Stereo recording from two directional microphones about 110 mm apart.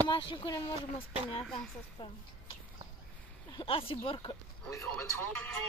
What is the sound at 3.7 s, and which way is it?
Speech, 60° left (ahead or behind).